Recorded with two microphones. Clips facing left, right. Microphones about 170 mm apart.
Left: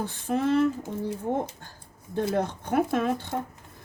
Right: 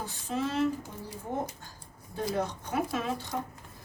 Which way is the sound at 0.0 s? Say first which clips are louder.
Left 6 dB; 55° left (ahead or behind).